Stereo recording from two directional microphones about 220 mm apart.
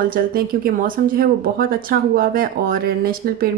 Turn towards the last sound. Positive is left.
turn(degrees=-40)  # may be behind; listen again after turning